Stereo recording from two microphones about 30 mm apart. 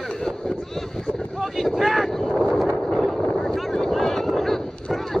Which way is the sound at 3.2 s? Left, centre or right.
Centre.